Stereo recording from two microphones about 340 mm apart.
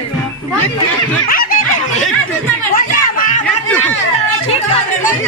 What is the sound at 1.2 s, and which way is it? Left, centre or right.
Snicker, left.